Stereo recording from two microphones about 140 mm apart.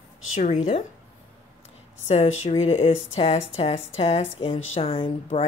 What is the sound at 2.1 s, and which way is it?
A woman's voice, 50° left (ahead or behind).